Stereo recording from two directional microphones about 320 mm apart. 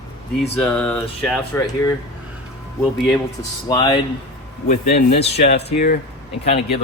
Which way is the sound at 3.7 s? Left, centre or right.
Centre.